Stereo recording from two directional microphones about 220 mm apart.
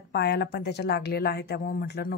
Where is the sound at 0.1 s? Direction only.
50° left (ahead or behind).